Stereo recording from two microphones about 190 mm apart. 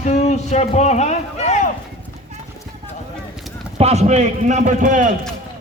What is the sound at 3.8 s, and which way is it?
A man's voice, 35° right (ahead or behind).